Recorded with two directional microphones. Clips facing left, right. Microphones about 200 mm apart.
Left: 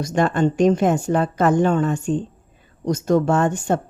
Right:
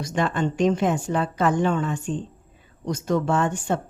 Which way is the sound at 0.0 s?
45° left (ahead or behind).